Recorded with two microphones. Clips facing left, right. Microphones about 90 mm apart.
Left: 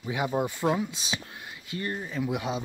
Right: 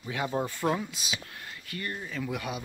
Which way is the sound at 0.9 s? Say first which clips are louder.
Left 2 dB; 30° left (ahead or behind).